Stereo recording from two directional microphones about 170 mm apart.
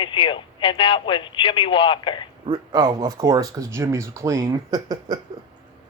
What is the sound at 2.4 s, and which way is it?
Speech, 25° right (ahead or behind).